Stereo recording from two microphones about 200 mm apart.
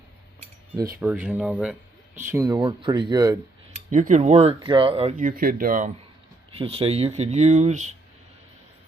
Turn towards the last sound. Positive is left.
turn(degrees=-35)  # may be behind; listen again after turning